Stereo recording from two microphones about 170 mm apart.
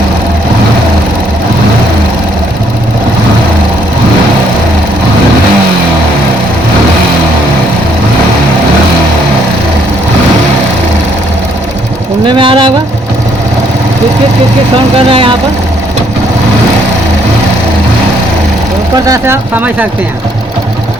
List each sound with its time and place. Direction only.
12.2 s a sound: 30° right (ahead or behind)
14.9 s speech: 30° right (ahead or behind)
19.0 s speech: 15° right (ahead or behind)